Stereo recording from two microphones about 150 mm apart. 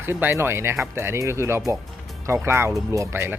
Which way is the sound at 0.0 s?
15° right (ahead or behind).